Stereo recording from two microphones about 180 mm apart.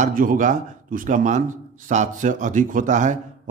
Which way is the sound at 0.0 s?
50° right (ahead or behind).